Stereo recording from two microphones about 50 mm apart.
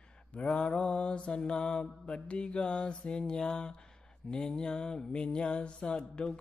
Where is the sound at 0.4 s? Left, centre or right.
Left.